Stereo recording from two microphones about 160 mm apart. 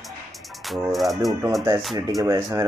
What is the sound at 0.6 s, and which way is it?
Speech, centre (ahead or behind).